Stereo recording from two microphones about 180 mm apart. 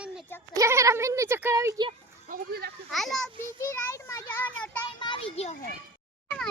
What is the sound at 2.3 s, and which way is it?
Speech, 60° right (ahead or behind).